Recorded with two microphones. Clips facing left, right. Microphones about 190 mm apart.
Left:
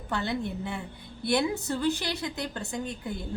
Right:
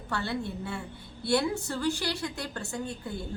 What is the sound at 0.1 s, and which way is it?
A woman's voice, 20° left (ahead or behind).